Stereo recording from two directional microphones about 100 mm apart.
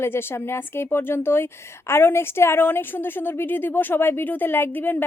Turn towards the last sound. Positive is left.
turn(degrees=20)  # may be behind; listen again after turning